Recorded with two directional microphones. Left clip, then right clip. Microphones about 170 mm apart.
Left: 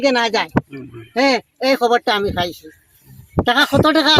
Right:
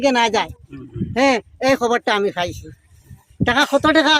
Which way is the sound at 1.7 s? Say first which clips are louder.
Left 3 dB; centre (ahead or behind).